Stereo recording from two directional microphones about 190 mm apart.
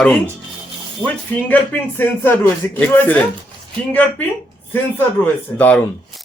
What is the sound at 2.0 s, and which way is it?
Speech, 10° left (ahead or behind).